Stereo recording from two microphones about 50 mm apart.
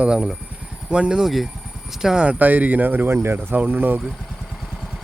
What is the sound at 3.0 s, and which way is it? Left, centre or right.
Speech, right.